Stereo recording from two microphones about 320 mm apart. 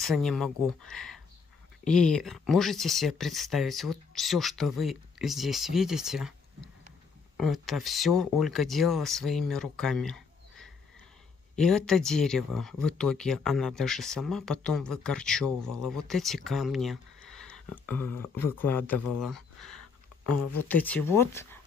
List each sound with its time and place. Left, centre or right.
0.0 s speech: centre
20.2 s speech: left
20.6 s speech: centre